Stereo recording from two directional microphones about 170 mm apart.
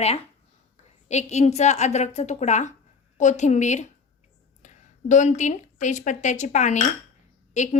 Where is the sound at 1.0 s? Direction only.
40° left (ahead or behind).